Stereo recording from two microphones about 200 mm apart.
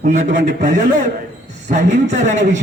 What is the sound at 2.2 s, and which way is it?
Speech, 35° right (ahead or behind).